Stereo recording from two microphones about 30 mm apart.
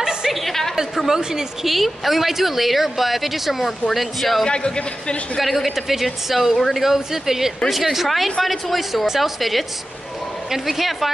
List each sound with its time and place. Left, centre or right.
0.0 s a sound: right
0.3 s a sound: centre
1.1 s speech: centre
1.7 s a woman's voice: centre
4.5 s a man's voice: left
5.4 s a woman's voice: centre